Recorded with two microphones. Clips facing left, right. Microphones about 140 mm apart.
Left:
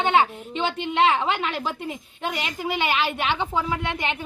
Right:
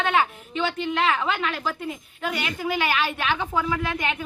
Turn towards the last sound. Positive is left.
turn(degrees=25)  # may be behind; listen again after turning